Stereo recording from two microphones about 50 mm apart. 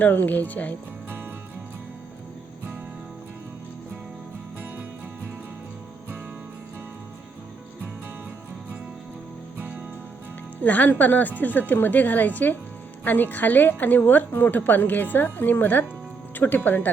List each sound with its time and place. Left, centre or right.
0.0 s a woman's voice: left
10.6 s a woman's voice: left
16.3 s music: left
16.6 s a woman's voice: left